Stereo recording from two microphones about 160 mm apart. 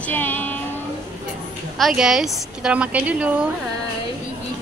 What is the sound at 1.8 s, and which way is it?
A woman's voice, centre (ahead or behind).